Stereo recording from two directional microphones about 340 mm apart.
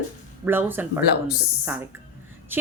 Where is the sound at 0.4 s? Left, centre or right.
Centre.